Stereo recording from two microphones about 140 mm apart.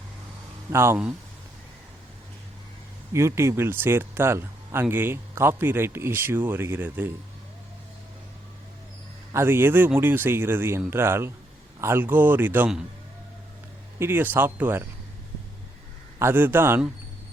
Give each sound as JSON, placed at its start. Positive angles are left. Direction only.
{"t": 0.7, "sound": "speech", "side_deg": -20}
{"t": 3.1, "sound": "speech", "side_deg": -20}
{"t": 9.3, "sound": "speech", "side_deg": -15}
{"t": 14.0, "sound": "speech", "side_deg": -15}
{"t": 16.1, "sound": "speech", "side_deg": -15}